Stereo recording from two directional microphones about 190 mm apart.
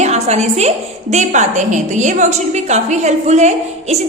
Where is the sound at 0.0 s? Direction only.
35° right (ahead or behind).